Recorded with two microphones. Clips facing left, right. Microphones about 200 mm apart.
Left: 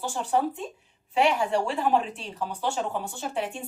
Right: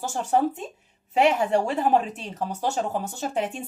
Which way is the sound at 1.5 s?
45° right (ahead or behind).